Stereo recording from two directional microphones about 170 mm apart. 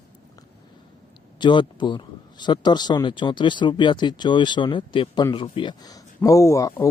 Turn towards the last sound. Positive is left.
turn(degrees=20)  # may be behind; listen again after turning